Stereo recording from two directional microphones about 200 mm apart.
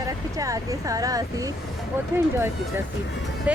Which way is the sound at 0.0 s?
15° right (ahead or behind).